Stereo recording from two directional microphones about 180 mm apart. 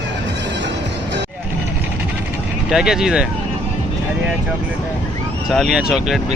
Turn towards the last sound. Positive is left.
turn(degrees=0)  # may be behind; listen again after turning